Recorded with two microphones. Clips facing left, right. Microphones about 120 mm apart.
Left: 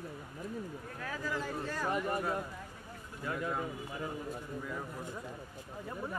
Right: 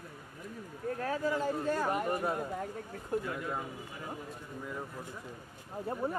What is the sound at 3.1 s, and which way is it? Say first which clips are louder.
Speech: right 14 dB; 55° right (ahead or behind).